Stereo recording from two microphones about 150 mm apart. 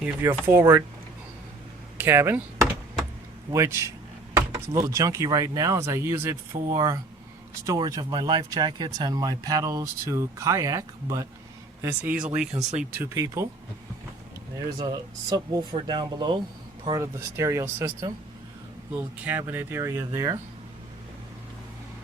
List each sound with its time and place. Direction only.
0.0 s speech: 15° right (ahead or behind)
2.0 s speech: 15° right (ahead or behind)
3.5 s speech: 20° right (ahead or behind)
11.8 s speech: 15° right (ahead or behind)
12.5 s speech: 50° right (ahead or behind)
13.0 s speech: 20° right (ahead or behind)
14.8 s speech: 25° right (ahead or behind)